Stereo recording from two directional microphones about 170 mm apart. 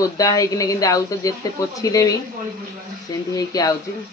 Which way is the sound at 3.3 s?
20° left (ahead or behind).